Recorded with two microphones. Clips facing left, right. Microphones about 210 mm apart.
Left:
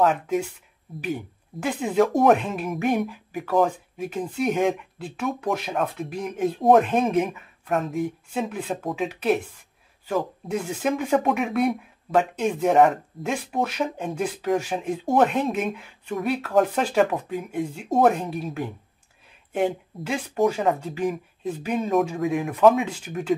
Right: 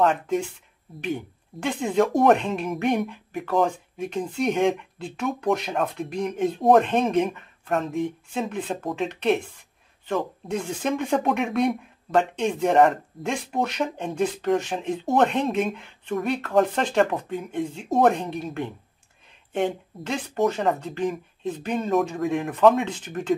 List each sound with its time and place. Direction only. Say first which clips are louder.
0.0 s speech: even; 5° left (ahead or behind)